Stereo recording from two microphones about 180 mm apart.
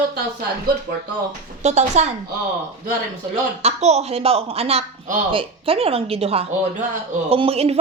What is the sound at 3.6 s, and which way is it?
Speech, 35° right (ahead or behind).